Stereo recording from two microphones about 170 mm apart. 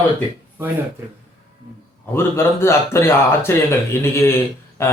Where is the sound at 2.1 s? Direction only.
15° left (ahead or behind).